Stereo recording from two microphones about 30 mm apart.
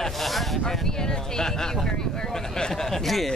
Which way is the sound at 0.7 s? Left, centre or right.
Centre.